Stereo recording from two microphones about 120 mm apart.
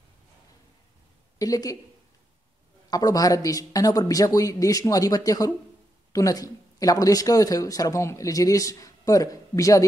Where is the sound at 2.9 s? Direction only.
30° left (ahead or behind).